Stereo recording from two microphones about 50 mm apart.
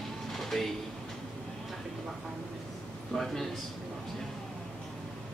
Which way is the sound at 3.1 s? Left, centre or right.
Centre.